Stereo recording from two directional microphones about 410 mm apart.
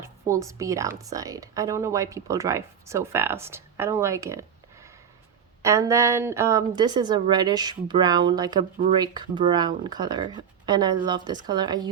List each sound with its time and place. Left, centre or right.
0.0 s a woman's voice: centre